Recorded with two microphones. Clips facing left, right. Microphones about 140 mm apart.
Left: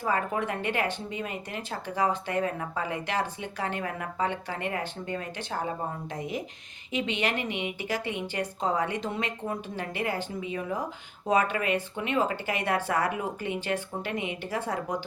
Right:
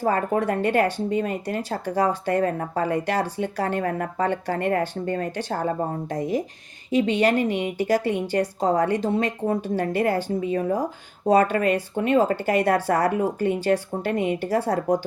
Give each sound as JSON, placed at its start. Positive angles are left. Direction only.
{"t": 0.0, "sound": "speech", "side_deg": -40}